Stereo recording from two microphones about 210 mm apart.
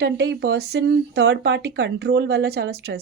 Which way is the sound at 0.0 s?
55° right (ahead or behind).